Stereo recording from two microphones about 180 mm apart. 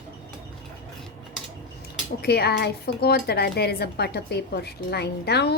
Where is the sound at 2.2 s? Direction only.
60° left (ahead or behind).